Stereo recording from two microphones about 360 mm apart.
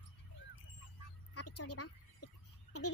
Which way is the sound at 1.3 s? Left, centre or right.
Left.